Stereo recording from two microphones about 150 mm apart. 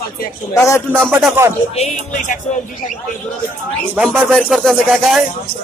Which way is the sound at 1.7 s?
55° left (ahead or behind).